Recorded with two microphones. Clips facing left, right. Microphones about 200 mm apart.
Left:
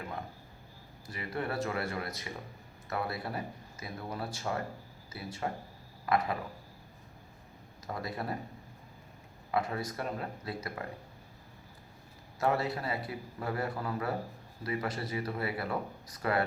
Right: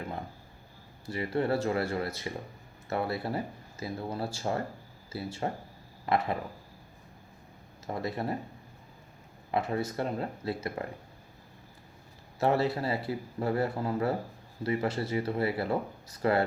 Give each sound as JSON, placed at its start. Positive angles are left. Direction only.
{"t": 1.0, "sound": "speech", "side_deg": -30}
{"t": 7.9, "sound": "speech", "side_deg": -25}
{"t": 9.5, "sound": "speech", "side_deg": -25}
{"t": 12.4, "sound": "speech", "side_deg": -25}